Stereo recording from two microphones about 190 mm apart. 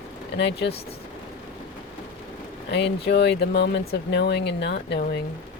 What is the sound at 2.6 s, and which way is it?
Speech, 65° left (ahead or behind).